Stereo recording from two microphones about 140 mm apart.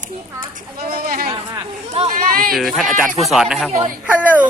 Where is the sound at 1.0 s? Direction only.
90° right.